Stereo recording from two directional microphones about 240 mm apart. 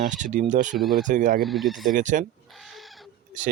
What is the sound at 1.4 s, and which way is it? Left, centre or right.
Speech, centre.